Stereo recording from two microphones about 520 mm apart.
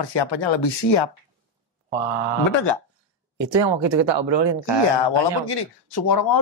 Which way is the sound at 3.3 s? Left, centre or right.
Right.